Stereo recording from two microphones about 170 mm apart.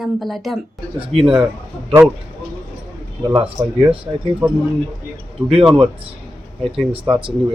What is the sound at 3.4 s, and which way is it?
Speech, 30° right (ahead or behind).